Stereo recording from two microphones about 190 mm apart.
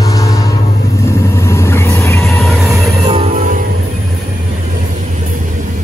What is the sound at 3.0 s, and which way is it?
Music, 30° right (ahead or behind).